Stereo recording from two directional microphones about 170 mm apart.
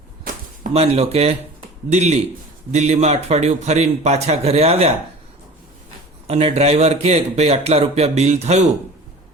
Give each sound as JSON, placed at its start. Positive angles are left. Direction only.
{"t": 0.7, "sound": "speech", "side_deg": -35}
{"t": 6.2, "sound": "speech", "side_deg": -35}